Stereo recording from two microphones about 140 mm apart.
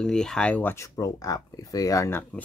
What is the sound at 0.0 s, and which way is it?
Speech, 5° left (ahead or behind).